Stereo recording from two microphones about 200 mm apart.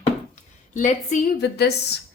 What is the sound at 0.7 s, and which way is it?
Speech, 40° left (ahead or behind).